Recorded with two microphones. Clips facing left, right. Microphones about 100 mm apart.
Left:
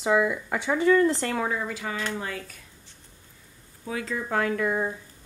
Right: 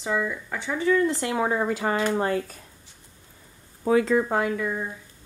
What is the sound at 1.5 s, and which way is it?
A woman's voice, 40° right (ahead or behind).